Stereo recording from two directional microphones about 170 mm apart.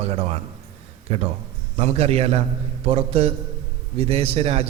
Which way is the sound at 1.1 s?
35° right (ahead or behind).